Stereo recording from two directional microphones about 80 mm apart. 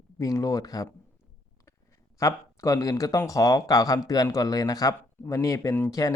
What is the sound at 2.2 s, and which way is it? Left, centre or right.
Speech, left.